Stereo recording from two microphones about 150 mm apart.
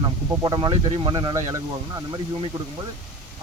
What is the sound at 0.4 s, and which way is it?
Speech, 30° right (ahead or behind).